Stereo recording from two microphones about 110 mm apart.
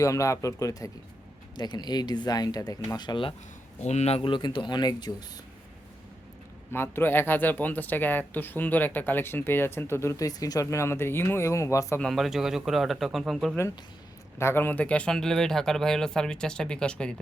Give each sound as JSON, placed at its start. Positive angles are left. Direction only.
{"t": 0.0, "sound": "speech", "side_deg": 30}
{"t": 1.5, "sound": "speech", "side_deg": 40}
{"t": 3.8, "sound": "speech", "side_deg": 80}
{"t": 4.2, "sound": "speech", "side_deg": 45}
{"t": 6.7, "sound": "speech", "side_deg": 20}
{"t": 11.9, "sound": "speech", "side_deg": 0}
{"t": 14.3, "sound": "speech", "side_deg": 20}